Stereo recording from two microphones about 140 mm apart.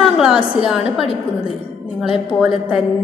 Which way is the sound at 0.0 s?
5° right (ahead or behind).